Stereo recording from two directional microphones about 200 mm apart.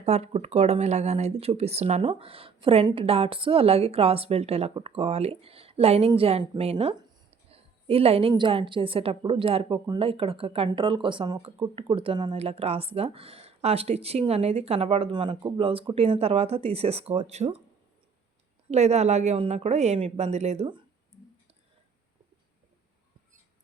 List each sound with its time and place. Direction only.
0.0 s speech: 30° right (ahead or behind)
18.7 s a woman's voice: 35° right (ahead or behind)